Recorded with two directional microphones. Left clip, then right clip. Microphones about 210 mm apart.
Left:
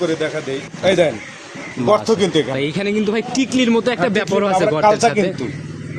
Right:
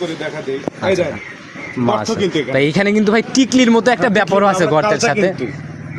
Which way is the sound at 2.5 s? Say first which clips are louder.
Right 5 dB; 30° right (ahead or behind).